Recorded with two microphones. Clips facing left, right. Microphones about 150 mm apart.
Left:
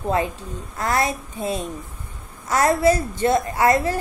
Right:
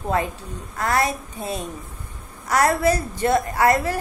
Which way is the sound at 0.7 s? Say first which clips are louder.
Even; 25° left (ahead or behind).